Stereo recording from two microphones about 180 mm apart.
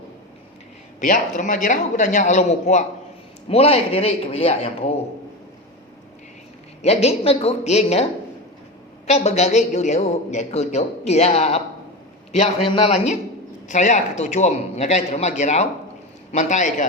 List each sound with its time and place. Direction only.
0.9 s a man's voice: 45° left (ahead or behind)
6.8 s a woman's voice: 35° left (ahead or behind)
9.0 s a woman's voice: 40° left (ahead or behind)
13.7 s a woman's voice: 40° left (ahead or behind)